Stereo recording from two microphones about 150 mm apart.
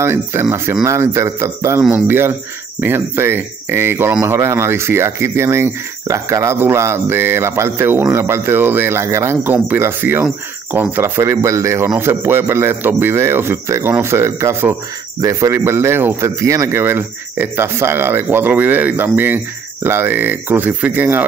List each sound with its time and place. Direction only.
0.0 s speech: 15° right (ahead or behind)